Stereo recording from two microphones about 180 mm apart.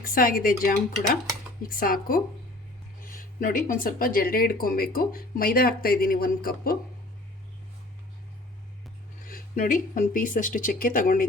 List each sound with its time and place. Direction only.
0.0 s speech: 55° left (ahead or behind)
9.2 s speech: 50° left (ahead or behind)